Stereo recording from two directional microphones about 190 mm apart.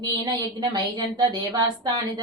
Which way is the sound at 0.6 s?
20° right (ahead or behind).